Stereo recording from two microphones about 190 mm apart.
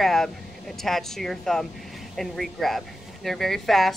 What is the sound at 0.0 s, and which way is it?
Speech, centre (ahead or behind).